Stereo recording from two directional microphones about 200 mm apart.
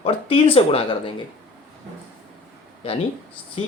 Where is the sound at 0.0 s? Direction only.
25° left (ahead or behind).